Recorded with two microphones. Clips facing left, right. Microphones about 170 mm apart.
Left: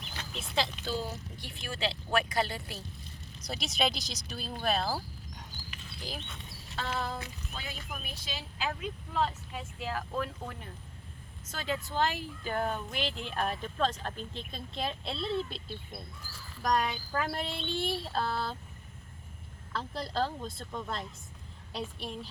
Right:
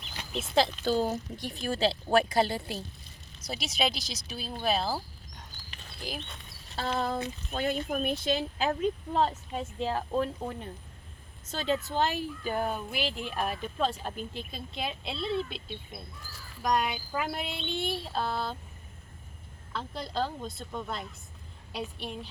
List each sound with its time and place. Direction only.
0.6 s speech: 40° right (ahead or behind)
3.4 s speech: centre (ahead or behind)
5.6 s a sound: 5° left (ahead or behind)
6.7 s speech: 35° right (ahead or behind)
7.5 s speech: 60° right (ahead or behind); by 9.6 s 40° right (ahead or behind)
9.7 s speech: 25° right (ahead or behind); by 18.5 s centre (ahead or behind)
19.7 s speech: centre (ahead or behind)